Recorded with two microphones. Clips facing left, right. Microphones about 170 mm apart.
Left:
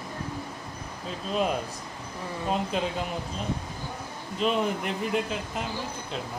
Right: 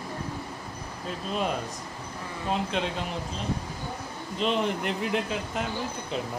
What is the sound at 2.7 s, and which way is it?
Speech, 5° left (ahead or behind).